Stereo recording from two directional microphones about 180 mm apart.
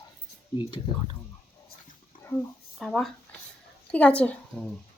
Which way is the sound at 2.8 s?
5° left (ahead or behind).